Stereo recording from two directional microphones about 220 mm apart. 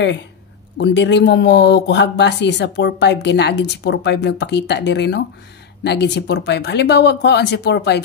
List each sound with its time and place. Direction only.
0.7 s speech: 55° left (ahead or behind)